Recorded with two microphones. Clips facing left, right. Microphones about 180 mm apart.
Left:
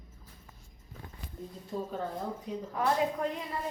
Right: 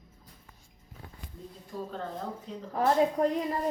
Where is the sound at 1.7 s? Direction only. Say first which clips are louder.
Left 2 dB; 25° left (ahead or behind).